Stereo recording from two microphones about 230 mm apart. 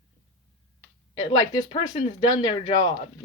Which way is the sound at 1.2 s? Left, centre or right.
Left.